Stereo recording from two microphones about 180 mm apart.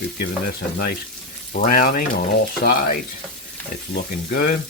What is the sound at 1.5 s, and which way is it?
Speech, 50° left (ahead or behind).